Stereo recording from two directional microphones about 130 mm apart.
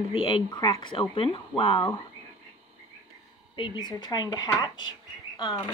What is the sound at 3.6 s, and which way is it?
Speech, 35° left (ahead or behind).